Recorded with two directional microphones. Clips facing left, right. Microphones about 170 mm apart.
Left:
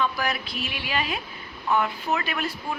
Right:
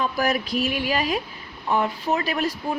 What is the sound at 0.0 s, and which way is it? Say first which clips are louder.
Speech: right 4 dB; 40° right (ahead or behind).